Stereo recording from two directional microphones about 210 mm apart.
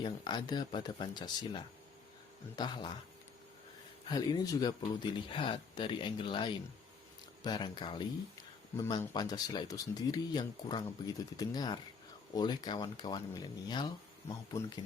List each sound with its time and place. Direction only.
0.0 s speech: 20° left (ahead or behind)
4.1 s speech: 20° left (ahead or behind)